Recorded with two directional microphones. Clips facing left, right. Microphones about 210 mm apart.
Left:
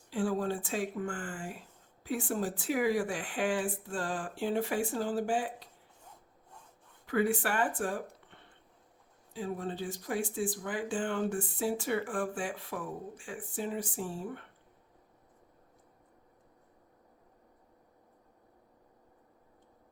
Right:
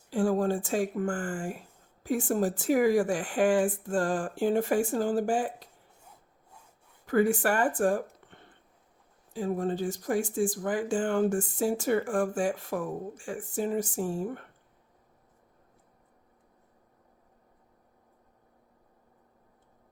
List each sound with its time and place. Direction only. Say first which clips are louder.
0.1 s speech: right 5 dB; 45° right (ahead or behind)
7.1 s speech: right 5 dB; 45° right (ahead or behind)
9.3 s speech: right 7 dB; 45° right (ahead or behind)